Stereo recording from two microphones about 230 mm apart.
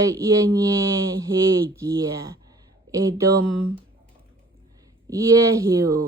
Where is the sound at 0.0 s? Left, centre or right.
Centre.